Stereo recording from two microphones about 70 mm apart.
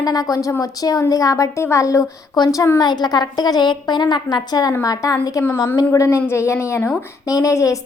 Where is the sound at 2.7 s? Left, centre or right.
Left.